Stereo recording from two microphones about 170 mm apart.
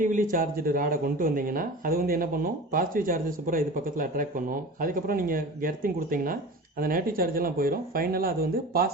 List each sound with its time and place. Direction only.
0.0 s speech: 50° right (ahead or behind)